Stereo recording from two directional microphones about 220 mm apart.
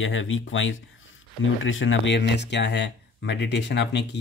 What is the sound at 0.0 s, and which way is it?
Speech, 60° left (ahead or behind).